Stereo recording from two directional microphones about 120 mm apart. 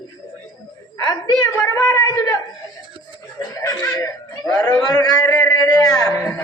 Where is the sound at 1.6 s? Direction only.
30° left (ahead or behind).